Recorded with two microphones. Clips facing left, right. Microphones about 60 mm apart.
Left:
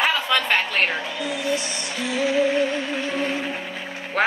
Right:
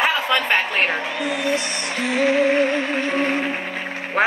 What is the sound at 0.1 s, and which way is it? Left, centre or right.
Speech, centre.